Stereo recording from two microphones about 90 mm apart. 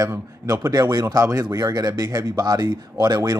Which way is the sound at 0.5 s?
45° right (ahead or behind).